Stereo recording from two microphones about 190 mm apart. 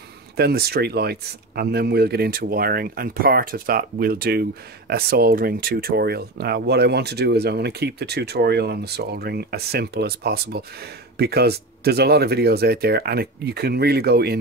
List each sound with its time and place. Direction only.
0.4 s speech: 55° right (ahead or behind)